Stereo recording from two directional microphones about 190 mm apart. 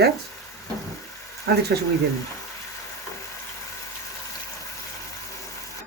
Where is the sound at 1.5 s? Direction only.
55° right (ahead or behind).